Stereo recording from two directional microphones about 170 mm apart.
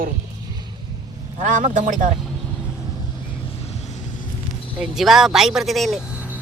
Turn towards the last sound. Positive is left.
turn(degrees=-10)  # may be behind; listen again after turning